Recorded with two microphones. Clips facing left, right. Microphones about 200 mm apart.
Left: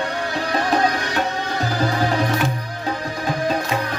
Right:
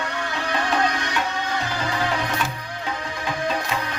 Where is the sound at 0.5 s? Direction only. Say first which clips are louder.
Left 3 dB; 35° left (ahead or behind).